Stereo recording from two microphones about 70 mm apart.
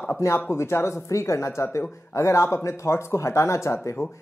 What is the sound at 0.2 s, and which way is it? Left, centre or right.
Speech, left.